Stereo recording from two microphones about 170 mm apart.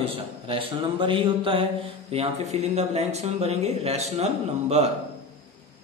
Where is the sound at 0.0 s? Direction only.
35° right (ahead or behind).